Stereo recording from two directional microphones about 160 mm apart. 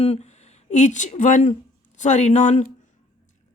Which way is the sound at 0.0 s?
40° left (ahead or behind).